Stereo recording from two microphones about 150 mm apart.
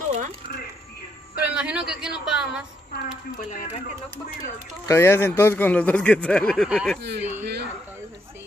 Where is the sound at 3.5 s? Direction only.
55° left (ahead or behind).